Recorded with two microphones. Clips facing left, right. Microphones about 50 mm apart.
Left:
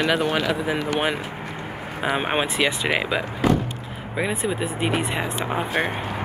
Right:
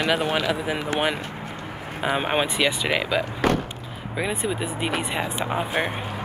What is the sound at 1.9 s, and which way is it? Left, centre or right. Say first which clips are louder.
Speech: even; centre.